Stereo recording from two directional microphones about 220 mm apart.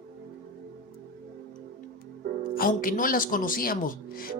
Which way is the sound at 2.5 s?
40° left (ahead or behind).